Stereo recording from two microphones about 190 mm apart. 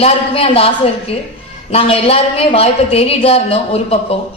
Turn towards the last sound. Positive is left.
turn(degrees=30)  # may be behind; listen again after turning